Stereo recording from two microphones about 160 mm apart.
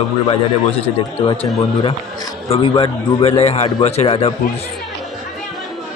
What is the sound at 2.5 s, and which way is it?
A man's voice, 30° left (ahead or behind).